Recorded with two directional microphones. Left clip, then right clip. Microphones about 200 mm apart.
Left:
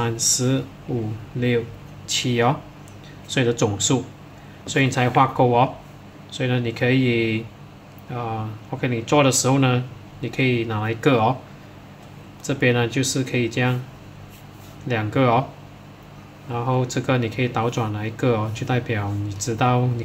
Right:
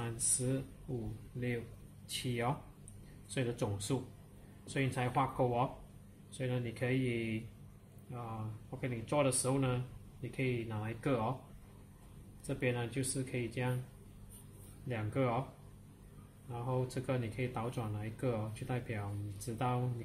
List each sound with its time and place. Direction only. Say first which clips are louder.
0.0 s speech: left 18 dB; 15° left (ahead or behind)
2.0 s speech: left 17 dB; 15° left (ahead or behind)
12.4 s speech: left 17 dB; 20° left (ahead or behind)
14.9 s speech: left 17 dB; 20° left (ahead or behind)
16.5 s speech: left 16 dB; 20° left (ahead or behind)